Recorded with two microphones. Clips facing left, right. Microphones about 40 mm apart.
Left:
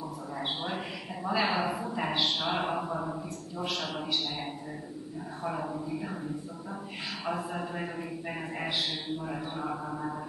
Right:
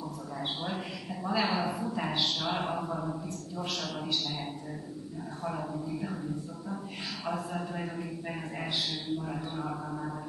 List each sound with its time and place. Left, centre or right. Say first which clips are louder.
0.4 s a man's voice: left 1 dB; centre
5.4 s a man's voice: left 2 dB; centre